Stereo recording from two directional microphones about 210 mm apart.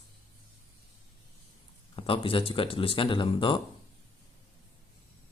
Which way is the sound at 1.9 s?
25° left (ahead or behind).